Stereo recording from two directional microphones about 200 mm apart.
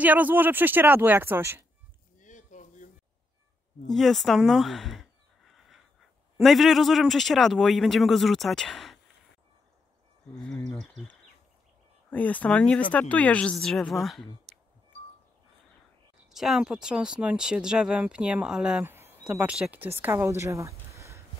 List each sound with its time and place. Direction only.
0.0 s speech: 10° right (ahead or behind)
2.1 s a sound: 40° left (ahead or behind)
3.8 s speech: centre (ahead or behind)
6.3 s speech: centre (ahead or behind)
10.3 s speech: 5° left (ahead or behind)
16.3 s speech: centre (ahead or behind)